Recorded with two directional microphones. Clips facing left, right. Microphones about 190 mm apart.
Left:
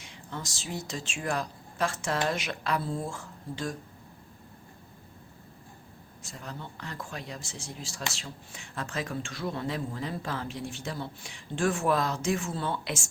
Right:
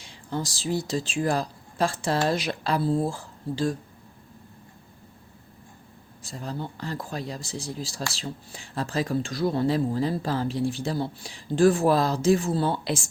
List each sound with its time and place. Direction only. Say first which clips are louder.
0.0 s speech: right 9 dB; 35° right (ahead or behind)
6.2 s speech: right 8 dB; 35° right (ahead or behind)